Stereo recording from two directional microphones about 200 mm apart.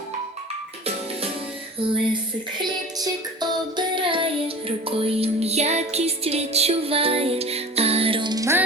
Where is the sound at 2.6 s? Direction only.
20° right (ahead or behind).